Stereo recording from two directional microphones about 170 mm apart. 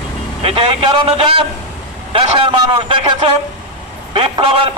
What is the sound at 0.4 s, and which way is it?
A man's voice, 30° right (ahead or behind).